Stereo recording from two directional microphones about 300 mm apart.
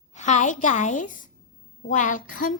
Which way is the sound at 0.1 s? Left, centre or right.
Left.